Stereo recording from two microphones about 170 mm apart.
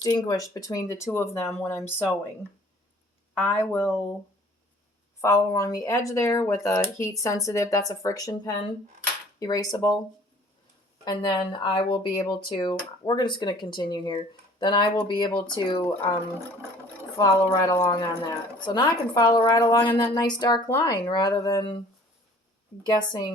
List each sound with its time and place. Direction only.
0.0 s speech: 20° left (ahead or behind)
3.3 s speech: 10° left (ahead or behind)
5.2 s speech: 20° left (ahead or behind)
11.0 s speech: 25° left (ahead or behind)
17.2 s speech: 20° left (ahead or behind)
22.8 s speech: 25° left (ahead or behind)